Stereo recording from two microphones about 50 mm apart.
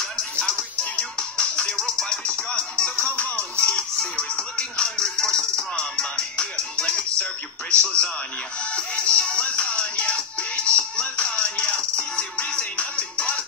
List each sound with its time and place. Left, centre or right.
0.4 s music: left
3.0 s music: left
3.6 s music: centre
7.7 s speech: left
8.7 s music: left